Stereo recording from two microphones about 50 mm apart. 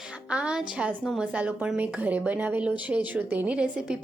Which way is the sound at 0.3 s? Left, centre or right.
Right.